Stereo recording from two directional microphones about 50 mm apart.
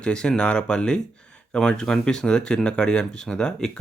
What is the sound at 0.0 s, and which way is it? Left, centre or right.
Speech, centre.